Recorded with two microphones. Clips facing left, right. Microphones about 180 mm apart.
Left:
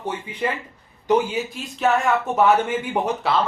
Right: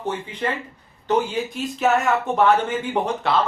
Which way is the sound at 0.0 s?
10° left (ahead or behind).